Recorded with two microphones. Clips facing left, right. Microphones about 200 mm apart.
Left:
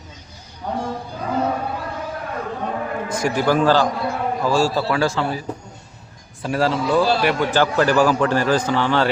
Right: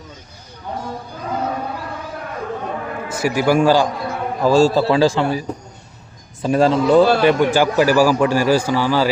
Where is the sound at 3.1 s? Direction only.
10° right (ahead or behind).